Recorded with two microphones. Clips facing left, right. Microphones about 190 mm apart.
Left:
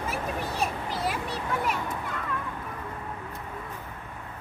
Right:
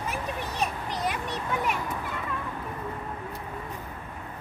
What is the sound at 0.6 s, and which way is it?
Children playing, 5° left (ahead or behind).